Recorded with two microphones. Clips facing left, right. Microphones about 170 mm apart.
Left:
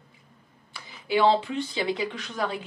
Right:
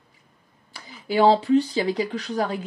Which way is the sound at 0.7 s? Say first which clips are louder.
Right 2 dB; 40° right (ahead or behind).